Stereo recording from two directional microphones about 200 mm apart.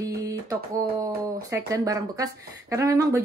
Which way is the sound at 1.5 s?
15° right (ahead or behind).